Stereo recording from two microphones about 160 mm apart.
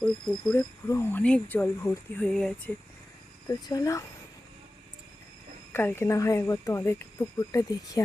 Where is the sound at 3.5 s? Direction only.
25° left (ahead or behind).